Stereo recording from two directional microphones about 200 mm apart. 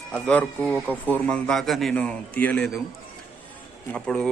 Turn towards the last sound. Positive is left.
turn(degrees=5)  # may be behind; listen again after turning